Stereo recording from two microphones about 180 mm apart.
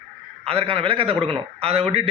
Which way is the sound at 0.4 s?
30° right (ahead or behind).